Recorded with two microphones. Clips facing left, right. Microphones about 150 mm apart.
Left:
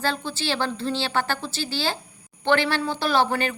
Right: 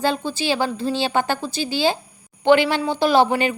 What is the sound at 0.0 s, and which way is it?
Speech, 15° right (ahead or behind).